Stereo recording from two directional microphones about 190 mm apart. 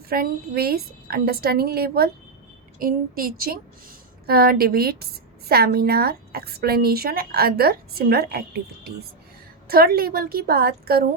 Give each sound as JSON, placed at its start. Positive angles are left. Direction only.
{"t": 0.1, "sound": "a woman's voice", "side_deg": -55}